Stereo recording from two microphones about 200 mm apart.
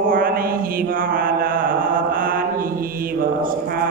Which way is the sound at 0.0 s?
45° right (ahead or behind).